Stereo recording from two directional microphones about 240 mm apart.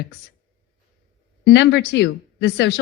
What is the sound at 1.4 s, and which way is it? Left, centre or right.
Speech, left.